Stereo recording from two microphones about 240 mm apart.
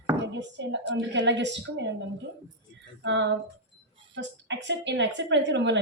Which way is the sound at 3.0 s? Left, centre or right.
Right.